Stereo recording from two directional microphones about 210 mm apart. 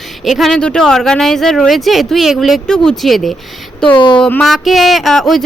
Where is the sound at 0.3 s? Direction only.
Centre (ahead or behind).